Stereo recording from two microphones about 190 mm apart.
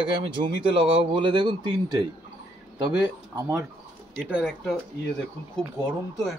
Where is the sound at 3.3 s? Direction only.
15° right (ahead or behind).